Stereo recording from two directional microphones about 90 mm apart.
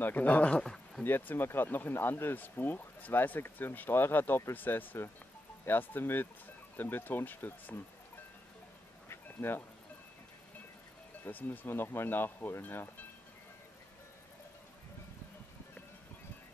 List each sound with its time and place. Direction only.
0.0 s speech: 20° left (ahead or behind)
1.0 s speech: 20° left (ahead or behind)
9.1 s a sound: 25° left (ahead or behind)
11.2 s speech: 20° left (ahead or behind)